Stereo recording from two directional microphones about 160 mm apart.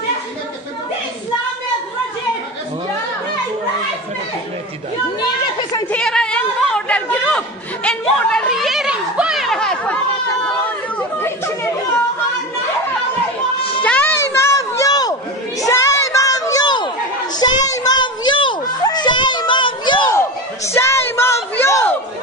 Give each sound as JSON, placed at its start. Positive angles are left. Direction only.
{"t": 5.2, "sound": "chatter", "side_deg": 25}
{"t": 5.9, "sound": "chatter", "side_deg": 5}
{"t": 11.0, "sound": "chatter", "side_deg": 15}
{"t": 13.6, "sound": "children playing", "side_deg": 35}
{"t": 13.8, "sound": "a sound", "side_deg": 10}
{"t": 17.4, "sound": "children playing", "side_deg": 25}
{"t": 20.2, "sound": "a sound", "side_deg": 15}